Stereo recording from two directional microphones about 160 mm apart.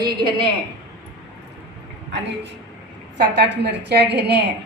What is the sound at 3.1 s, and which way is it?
A woman's voice, 90° right.